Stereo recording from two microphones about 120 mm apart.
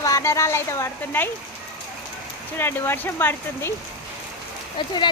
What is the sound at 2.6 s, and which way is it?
Speech, 20° left (ahead or behind).